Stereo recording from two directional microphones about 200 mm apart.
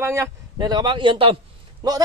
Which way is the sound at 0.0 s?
15° right (ahead or behind).